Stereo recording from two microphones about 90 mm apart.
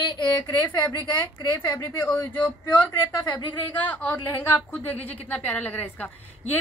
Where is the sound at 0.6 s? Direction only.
20° left (ahead or behind).